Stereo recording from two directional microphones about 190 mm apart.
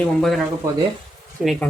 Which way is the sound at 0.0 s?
Centre (ahead or behind).